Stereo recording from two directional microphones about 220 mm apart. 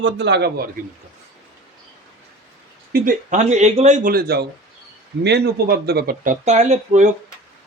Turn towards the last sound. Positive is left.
turn(degrees=-30)  # may be behind; listen again after turning